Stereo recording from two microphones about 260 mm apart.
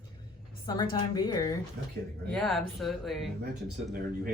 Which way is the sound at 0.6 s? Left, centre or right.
Centre.